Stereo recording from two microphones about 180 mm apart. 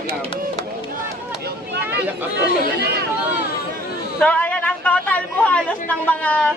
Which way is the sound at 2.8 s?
65° right (ahead or behind).